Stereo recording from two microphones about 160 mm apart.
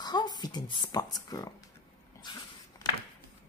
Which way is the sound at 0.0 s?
25° left (ahead or behind).